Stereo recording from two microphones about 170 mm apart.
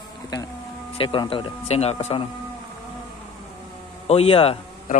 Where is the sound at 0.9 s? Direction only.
30° left (ahead or behind).